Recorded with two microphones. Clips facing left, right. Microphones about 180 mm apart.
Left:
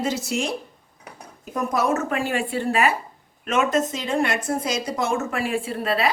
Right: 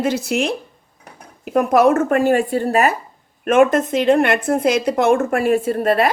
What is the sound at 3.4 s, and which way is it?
A woman's voice, 55° right (ahead or behind).